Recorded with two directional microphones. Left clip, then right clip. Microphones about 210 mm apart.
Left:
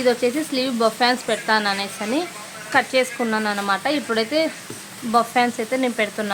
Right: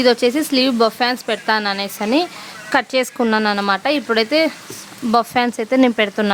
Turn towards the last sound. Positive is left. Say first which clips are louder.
# right 6 dB
turn(degrees=-45)  # may be behind; listen again after turning